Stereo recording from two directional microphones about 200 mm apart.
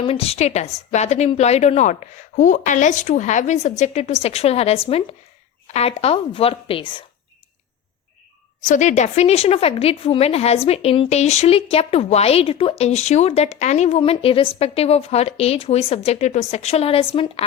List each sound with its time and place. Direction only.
0.0 s a woman's voice: 30° left (ahead or behind)
8.6 s a woman's voice: 35° left (ahead or behind)